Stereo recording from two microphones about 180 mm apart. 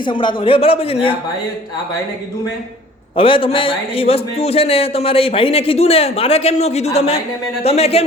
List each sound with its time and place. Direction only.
0.0 s a man's voice: 25° left (ahead or behind)
3.2 s a man's voice: 30° left (ahead or behind)